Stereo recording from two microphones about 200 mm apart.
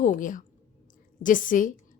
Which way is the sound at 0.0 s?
40° left (ahead or behind).